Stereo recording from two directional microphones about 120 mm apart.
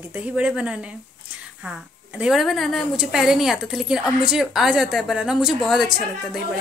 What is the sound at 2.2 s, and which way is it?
A woman's voice, centre (ahead or behind).